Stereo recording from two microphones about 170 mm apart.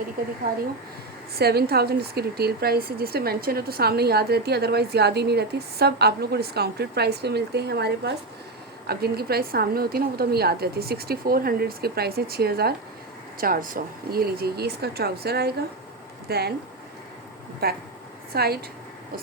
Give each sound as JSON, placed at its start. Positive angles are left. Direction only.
{"t": 1.4, "sound": "a woman's voice", "side_deg": -70}
{"t": 13.4, "sound": "a woman's voice", "side_deg": -55}
{"t": 17.6, "sound": "a woman's voice", "side_deg": -65}